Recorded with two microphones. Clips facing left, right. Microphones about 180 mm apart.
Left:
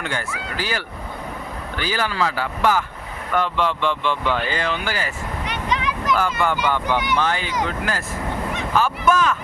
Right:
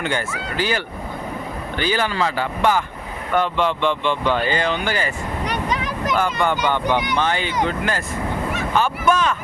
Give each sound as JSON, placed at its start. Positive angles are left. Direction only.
{"t": 0.0, "sound": "speech", "side_deg": 0}
{"t": 5.5, "sound": "a sound", "side_deg": -40}
{"t": 6.1, "sound": "speech", "side_deg": 0}
{"t": 6.7, "sound": "speech", "side_deg": -30}
{"t": 7.2, "sound": "speech", "side_deg": 0}